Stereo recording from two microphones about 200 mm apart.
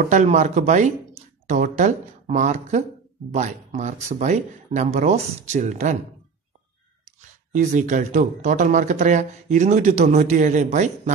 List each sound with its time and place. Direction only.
0.0 s speech: 40° right (ahead or behind)
7.2 s speech: 40° right (ahead or behind)